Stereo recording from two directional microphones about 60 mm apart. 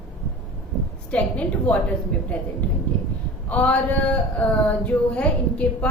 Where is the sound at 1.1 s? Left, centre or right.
Left.